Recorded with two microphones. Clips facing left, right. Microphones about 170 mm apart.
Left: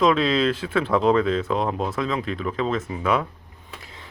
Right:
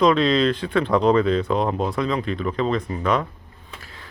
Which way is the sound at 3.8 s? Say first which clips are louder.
Even; 20° left (ahead or behind).